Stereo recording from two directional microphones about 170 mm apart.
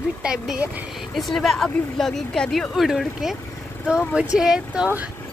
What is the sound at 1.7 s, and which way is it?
Speech, 10° left (ahead or behind).